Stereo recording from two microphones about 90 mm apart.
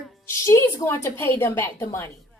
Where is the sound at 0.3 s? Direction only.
30° left (ahead or behind).